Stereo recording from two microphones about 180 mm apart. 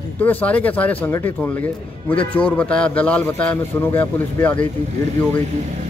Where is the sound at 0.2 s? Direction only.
10° left (ahead or behind).